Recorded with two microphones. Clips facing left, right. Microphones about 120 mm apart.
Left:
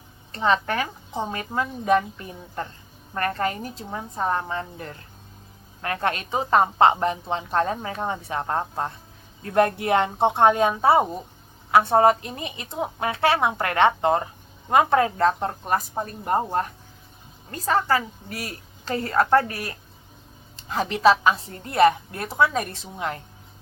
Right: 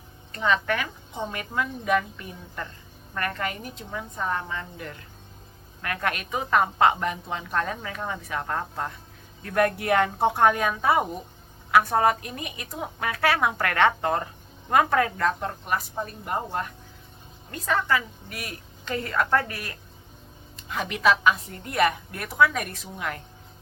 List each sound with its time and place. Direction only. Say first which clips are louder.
0.3 s a woman's voice: left 2 dB; 35° left (ahead or behind)